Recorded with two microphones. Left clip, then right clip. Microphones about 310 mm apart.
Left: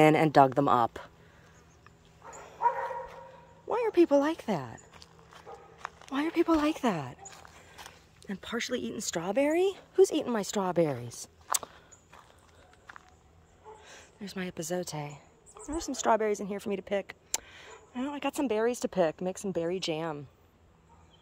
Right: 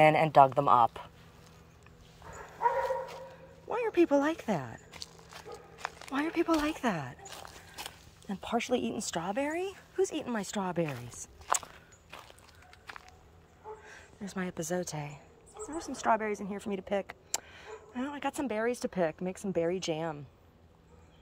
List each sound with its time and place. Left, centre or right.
0.0 s speech: left
3.6 s speech: centre
4.9 s walk: right
6.0 s speech: centre
7.2 s a sound: right
8.5 s speech: left
8.9 s speech: centre
11.5 s walk: right
12.9 s a sound: right
14.2 s speech: centre
15.7 s speech: left
16.5 s speech: centre